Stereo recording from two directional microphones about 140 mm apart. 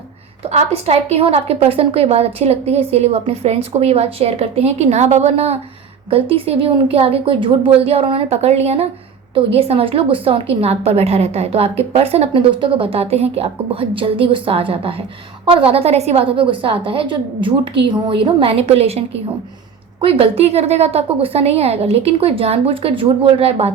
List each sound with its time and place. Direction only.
0.4 s a woman's voice: 45° right (ahead or behind)